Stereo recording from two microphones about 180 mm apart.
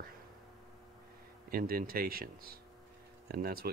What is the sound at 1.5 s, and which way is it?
Speech, 55° right (ahead or behind).